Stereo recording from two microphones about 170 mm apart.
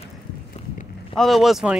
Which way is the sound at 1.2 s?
Centre (ahead or behind).